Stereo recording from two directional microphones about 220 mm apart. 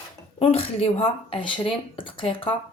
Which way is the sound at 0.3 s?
25° left (ahead or behind).